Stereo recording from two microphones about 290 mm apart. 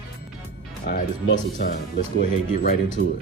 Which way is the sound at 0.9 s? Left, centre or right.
Left.